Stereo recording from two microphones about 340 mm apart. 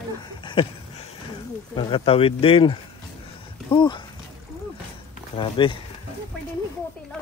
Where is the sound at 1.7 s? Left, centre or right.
Centre.